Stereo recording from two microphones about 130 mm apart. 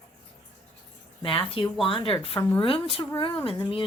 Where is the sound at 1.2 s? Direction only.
45° left (ahead or behind).